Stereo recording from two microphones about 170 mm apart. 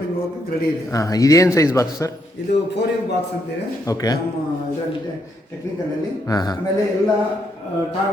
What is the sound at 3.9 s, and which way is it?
Speech, 20° left (ahead or behind).